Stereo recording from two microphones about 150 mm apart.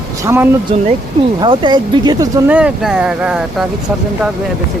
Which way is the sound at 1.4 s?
30° right (ahead or behind).